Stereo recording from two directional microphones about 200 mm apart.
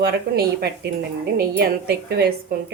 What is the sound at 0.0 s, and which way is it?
Speech, 50° right (ahead or behind).